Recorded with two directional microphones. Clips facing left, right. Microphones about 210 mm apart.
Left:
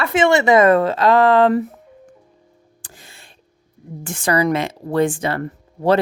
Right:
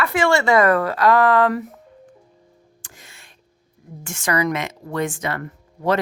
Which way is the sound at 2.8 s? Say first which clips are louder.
Left 4 dB; 35° left (ahead or behind).